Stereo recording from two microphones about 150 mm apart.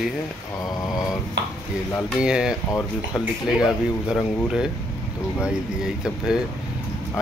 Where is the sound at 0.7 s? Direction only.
25° left (ahead or behind).